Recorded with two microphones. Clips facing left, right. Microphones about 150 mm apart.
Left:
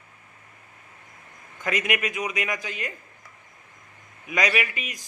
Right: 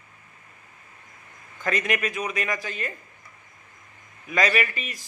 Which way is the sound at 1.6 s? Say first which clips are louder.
Right 1 dB; 15° left (ahead or behind).